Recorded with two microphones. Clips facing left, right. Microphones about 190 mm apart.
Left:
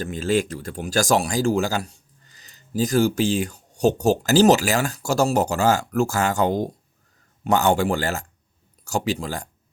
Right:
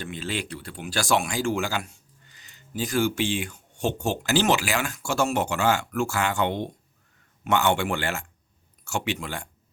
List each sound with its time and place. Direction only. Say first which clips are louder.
0.0 s speech: left 9 dB; 45° left (ahead or behind)